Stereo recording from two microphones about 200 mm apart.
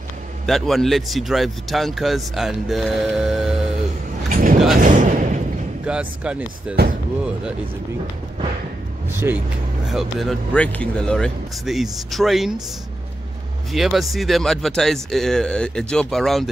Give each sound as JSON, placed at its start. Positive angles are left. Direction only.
{"t": 0.5, "sound": "speech", "side_deg": 0}
{"t": 4.3, "sound": "vehicle", "side_deg": -40}
{"t": 4.7, "sound": "a sound", "side_deg": -40}
{"t": 5.9, "sound": "speech", "side_deg": -5}
{"t": 9.1, "sound": "speech", "side_deg": -10}
{"t": 13.7, "sound": "speech", "side_deg": 0}